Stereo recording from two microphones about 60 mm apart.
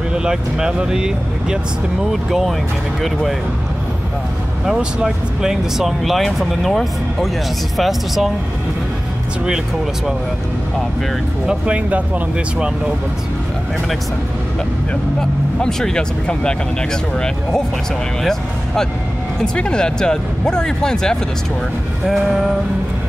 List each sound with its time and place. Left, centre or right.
0.1 s speech: centre
4.7 s speech: centre
11.4 s speech: right
15.1 s speech: centre
22.0 s speech: centre